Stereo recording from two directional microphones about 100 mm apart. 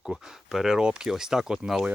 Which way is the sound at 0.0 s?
5° right (ahead or behind).